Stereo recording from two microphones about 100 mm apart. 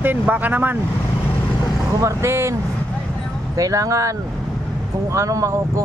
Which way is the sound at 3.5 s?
35° right (ahead or behind).